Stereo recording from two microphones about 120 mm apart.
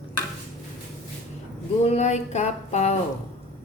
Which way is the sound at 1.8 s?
70° left (ahead or behind).